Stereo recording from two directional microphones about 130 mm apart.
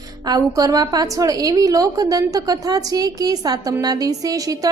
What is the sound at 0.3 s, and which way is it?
A woman's voice, 25° right (ahead or behind).